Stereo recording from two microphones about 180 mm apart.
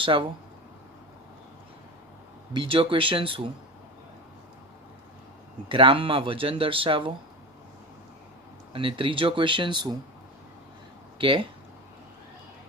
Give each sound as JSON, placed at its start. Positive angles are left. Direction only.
{"t": 0.0, "sound": "speech", "side_deg": -30}
{"t": 2.5, "sound": "speech", "side_deg": -30}
{"t": 5.6, "sound": "speech", "side_deg": -30}
{"t": 8.7, "sound": "speech", "side_deg": -30}
{"t": 11.2, "sound": "speech", "side_deg": -30}